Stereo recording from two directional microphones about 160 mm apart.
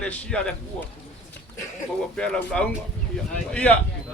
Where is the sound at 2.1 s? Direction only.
5° left (ahead or behind).